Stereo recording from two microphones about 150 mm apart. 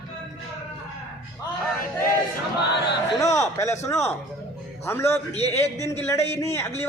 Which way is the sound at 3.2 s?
20° left (ahead or behind).